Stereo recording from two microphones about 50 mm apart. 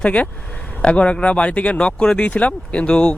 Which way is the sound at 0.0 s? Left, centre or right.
Left.